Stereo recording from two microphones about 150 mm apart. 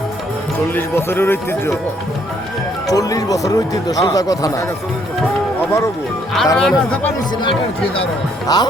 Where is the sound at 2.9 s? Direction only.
25° left (ahead or behind).